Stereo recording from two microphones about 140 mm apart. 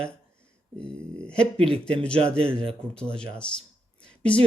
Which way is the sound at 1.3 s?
45° right (ahead or behind).